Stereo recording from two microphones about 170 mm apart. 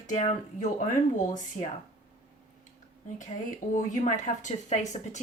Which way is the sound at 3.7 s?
45° left (ahead or behind).